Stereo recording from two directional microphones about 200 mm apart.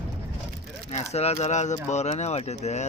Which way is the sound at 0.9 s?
35° left (ahead or behind).